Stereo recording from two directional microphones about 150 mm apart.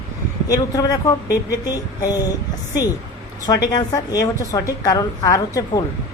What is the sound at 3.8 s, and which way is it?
Speech, 25° left (ahead or behind).